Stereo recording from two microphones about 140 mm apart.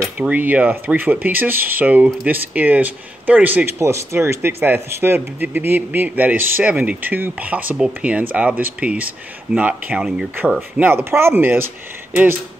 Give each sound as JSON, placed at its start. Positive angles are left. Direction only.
{"t": 0.2, "sound": "speech", "side_deg": -10}